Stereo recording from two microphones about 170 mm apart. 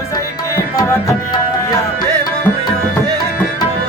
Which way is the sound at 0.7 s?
25° left (ahead or behind).